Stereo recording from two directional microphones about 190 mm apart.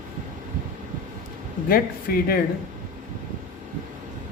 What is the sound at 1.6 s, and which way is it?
Speech, 50° left (ahead or behind).